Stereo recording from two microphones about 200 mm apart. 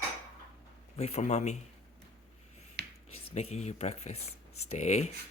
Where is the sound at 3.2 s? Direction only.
30° left (ahead or behind).